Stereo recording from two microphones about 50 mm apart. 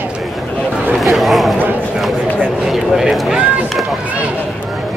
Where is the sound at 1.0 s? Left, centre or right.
Centre.